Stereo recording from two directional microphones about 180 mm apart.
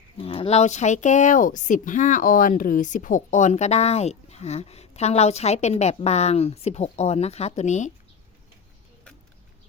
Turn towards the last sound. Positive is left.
turn(degrees=40)  # may be behind; listen again after turning